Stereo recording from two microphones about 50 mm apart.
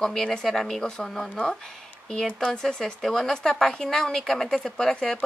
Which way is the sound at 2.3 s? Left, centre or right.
Centre.